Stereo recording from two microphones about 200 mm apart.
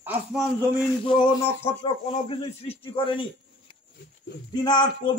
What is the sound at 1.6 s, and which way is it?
Speech, 25° left (ahead or behind).